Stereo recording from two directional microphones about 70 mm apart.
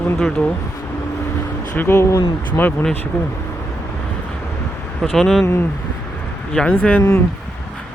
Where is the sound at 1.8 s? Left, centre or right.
Left.